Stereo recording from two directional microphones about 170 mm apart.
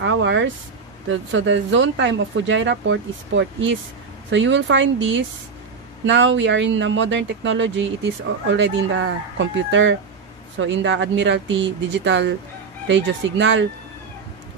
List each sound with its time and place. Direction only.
0.0 s speech: 90° right